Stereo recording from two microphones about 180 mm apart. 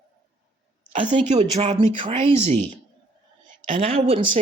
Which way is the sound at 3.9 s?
30° right (ahead or behind).